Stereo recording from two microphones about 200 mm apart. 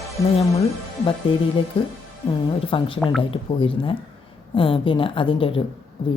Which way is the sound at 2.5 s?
25° left (ahead or behind).